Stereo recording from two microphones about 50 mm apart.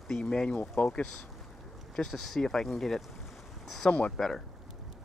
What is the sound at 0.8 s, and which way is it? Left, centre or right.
Speech, left.